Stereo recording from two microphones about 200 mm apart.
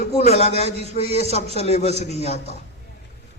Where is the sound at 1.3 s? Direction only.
30° left (ahead or behind).